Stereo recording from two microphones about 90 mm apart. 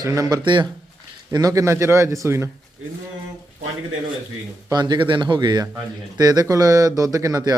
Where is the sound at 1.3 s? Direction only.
40° right (ahead or behind).